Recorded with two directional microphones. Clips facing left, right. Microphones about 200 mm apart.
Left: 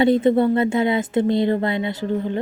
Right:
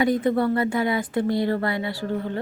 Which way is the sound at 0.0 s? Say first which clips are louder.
Left 5 dB; 25° left (ahead or behind).